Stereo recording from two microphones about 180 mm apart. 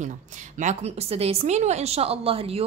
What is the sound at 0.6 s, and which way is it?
A woman's voice, 40° right (ahead or behind).